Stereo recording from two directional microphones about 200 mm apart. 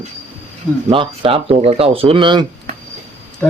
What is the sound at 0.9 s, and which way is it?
Speech, 25° right (ahead or behind).